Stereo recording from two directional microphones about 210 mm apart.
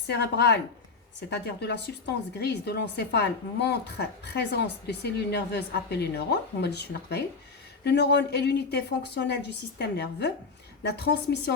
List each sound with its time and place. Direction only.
0.1 s a woman's voice: 55° left (ahead or behind)